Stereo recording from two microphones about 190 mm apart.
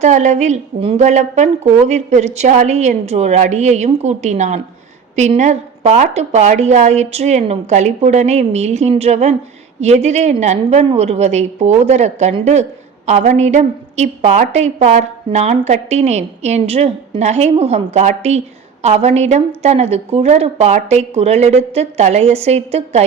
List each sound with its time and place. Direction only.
0.0 s a woman's voice: 40° right (ahead or behind)